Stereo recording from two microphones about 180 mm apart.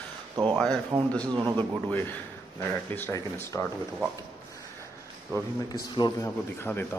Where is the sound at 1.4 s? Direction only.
25° right (ahead or behind).